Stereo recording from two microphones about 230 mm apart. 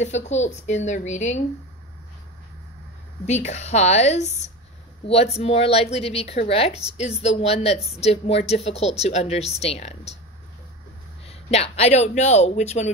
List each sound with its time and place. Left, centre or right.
0.0 s a woman's voice: left
3.3 s a woman's voice: left
11.2 s a woman's voice: left